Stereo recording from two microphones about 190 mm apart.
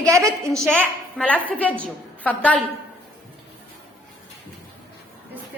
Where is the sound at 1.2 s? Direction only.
5° left (ahead or behind).